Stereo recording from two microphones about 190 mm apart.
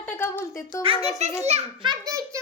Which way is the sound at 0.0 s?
10° left (ahead or behind).